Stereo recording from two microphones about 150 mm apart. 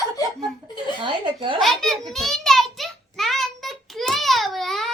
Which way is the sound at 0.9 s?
30° right (ahead or behind).